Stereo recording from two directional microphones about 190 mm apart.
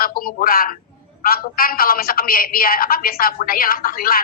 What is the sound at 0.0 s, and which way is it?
A woman's voice, 50° left (ahead or behind).